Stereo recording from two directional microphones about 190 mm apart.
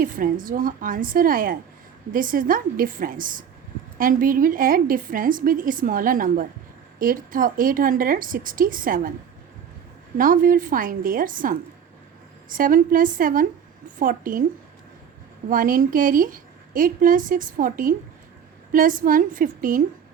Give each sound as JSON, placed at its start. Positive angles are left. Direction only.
{"t": 0.0, "sound": "a woman's voice", "side_deg": -45}
{"t": 10.2, "sound": "a woman's voice", "side_deg": -45}
{"t": 15.4, "sound": "a woman's voice", "side_deg": -45}